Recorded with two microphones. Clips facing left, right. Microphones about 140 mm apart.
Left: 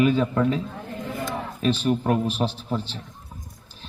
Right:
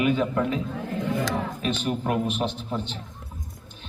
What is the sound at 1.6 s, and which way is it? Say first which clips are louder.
A man's voice: left 4 dB; 35° left (ahead or behind).